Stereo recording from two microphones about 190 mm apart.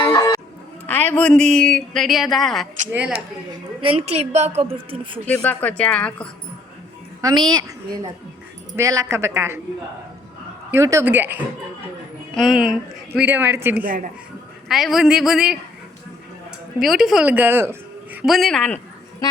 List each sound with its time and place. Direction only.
0.0 s music: 15° left (ahead or behind)
0.9 s speech: 10° left (ahead or behind)
3.8 s a woman's voice: 35° right (ahead or behind)
5.2 s speech: 10° left (ahead or behind)
7.2 s a woman's voice: 20° right (ahead or behind)
8.7 s a woman's voice: 15° right (ahead or behind)
10.7 s a woman's voice: 15° right (ahead or behind)
12.3 s a woman's voice: centre (ahead or behind)
13.8 s speech: 45° right (ahead or behind)
14.7 s speech: centre (ahead or behind)
16.8 s a woman's voice: centre (ahead or behind)